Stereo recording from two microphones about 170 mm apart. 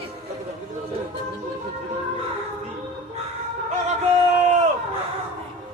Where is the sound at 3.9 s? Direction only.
40° right (ahead or behind).